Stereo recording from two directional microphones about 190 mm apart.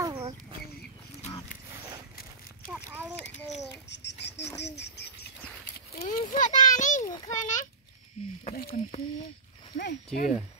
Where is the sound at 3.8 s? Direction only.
65° left (ahead or behind).